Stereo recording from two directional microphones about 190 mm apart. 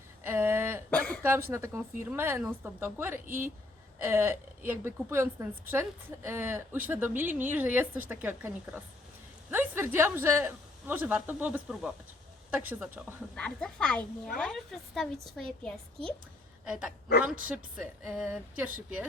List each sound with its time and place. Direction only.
0.3 s a sound: 10° right (ahead or behind)
0.9 s a sound: 10° left (ahead or behind)
1.2 s a woman's voice: 10° right (ahead or behind)
3.2 s a woman's voice: 45° right (ahead or behind)
4.0 s a woman's voice: 10° right (ahead or behind)
13.3 s a woman's voice: 5° left (ahead or behind)
17.2 s a woman's voice: 45° right (ahead or behind)
17.5 s a woman's voice: 5° right (ahead or behind)